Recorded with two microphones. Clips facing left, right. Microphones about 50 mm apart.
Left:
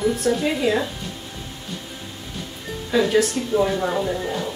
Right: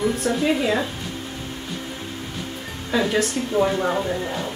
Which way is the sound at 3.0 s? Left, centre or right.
Centre.